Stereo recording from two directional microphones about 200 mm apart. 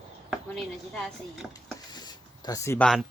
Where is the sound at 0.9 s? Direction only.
5° left (ahead or behind).